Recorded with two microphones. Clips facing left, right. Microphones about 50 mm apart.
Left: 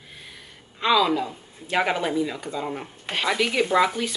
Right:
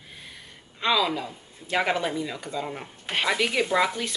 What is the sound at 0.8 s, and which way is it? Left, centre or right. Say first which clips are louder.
Speech: left 4 dB; centre.